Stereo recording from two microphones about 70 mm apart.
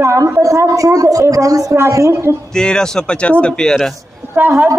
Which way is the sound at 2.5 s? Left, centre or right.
Centre.